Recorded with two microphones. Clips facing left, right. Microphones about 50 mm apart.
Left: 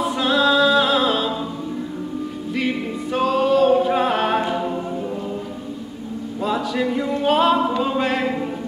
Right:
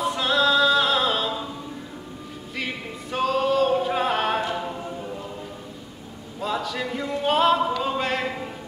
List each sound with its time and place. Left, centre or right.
0.0 s music: centre
2.5 s music: centre
6.4 s a sound: centre
7.8 s music: centre